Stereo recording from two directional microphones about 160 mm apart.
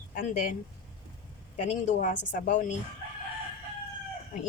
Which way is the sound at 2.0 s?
55° left (ahead or behind).